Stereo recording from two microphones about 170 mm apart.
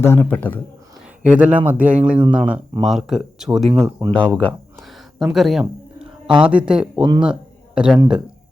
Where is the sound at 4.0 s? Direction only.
15° right (ahead or behind).